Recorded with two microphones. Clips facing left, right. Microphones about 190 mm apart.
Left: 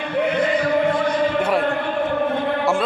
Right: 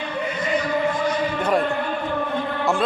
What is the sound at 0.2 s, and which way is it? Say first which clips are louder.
Music: left 10 dB; 65° left (ahead or behind).